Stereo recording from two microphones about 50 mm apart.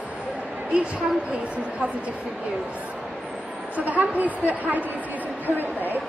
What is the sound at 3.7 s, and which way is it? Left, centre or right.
A woman's voice, right.